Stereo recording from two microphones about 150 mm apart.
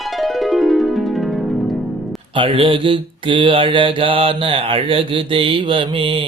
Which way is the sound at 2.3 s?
35° right (ahead or behind).